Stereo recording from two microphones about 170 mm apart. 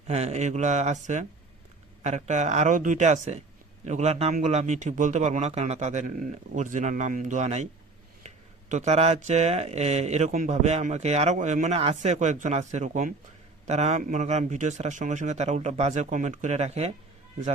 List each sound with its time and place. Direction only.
0.1 s speech: 40° right (ahead or behind)
8.7 s speech: 40° right (ahead or behind)